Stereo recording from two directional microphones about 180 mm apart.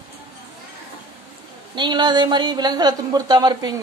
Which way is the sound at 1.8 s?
25° right (ahead or behind).